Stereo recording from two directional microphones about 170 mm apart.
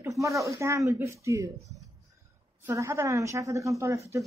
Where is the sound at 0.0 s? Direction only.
20° right (ahead or behind).